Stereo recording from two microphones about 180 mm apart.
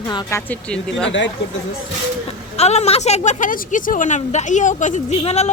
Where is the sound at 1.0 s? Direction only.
90° left.